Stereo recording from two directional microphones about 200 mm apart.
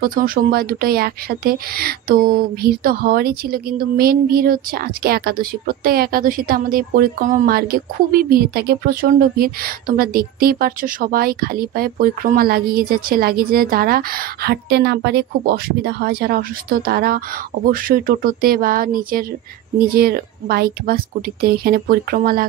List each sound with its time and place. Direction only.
0.0 s speech: 45° right (ahead or behind)